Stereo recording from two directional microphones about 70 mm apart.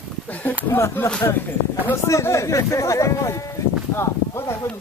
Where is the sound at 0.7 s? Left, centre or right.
Left.